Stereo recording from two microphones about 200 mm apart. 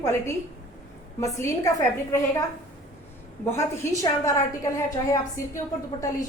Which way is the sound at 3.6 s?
15° left (ahead or behind).